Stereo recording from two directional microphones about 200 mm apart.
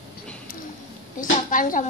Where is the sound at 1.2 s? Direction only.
40° left (ahead or behind).